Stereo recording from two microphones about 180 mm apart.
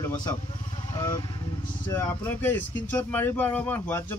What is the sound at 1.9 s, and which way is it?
Speech, 10° left (ahead or behind).